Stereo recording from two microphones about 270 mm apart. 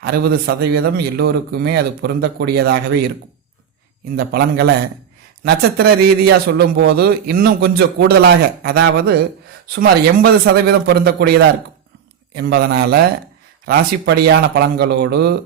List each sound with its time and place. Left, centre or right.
0.0 s a man's voice: right
4.2 s a man's voice: right